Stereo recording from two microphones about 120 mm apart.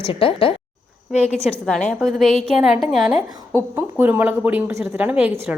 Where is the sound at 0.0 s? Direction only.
50° left (ahead or behind).